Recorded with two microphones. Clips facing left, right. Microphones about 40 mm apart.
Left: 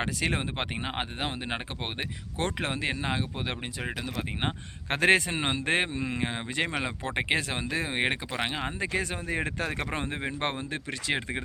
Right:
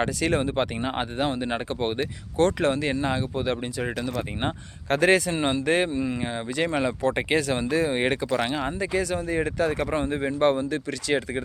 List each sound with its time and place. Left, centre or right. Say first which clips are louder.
0.0 s speech: right 6 dB; centre
4.9 s speech: right 2 dB; left
6.7 s speech: right 7 dB; left